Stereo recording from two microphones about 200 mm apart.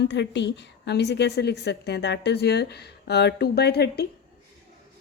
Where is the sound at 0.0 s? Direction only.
60° left (ahead or behind).